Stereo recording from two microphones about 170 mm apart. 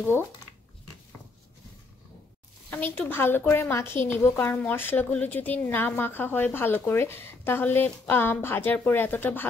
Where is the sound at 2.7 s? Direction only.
10° left (ahead or behind).